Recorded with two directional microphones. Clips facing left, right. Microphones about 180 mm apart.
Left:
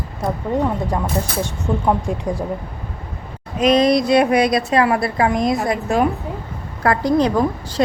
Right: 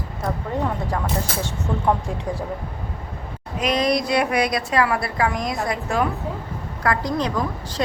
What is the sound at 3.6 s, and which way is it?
A woman's voice, 25° left (ahead or behind).